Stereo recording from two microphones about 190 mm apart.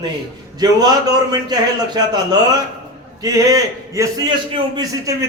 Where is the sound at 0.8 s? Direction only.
20° right (ahead or behind).